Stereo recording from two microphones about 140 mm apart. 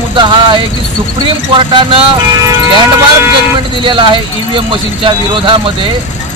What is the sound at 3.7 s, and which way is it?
Speech, 35° right (ahead or behind).